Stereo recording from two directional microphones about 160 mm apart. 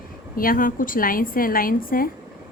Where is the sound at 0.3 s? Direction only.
60° left (ahead or behind).